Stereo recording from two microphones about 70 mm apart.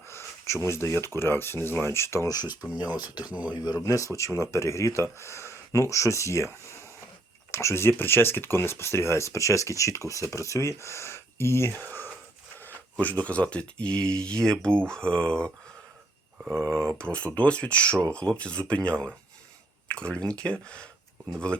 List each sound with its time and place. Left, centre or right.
0.1 s speech: left
2.2 s speech: left
3.2 s speech: centre
3.5 s speech: left; by 15.5 s centre
17.0 s speech: centre